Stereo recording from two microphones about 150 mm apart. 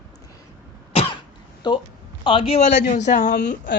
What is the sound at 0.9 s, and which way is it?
Cough, 40° left (ahead or behind).